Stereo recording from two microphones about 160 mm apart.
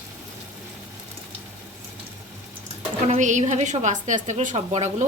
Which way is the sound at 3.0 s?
45° right (ahead or behind).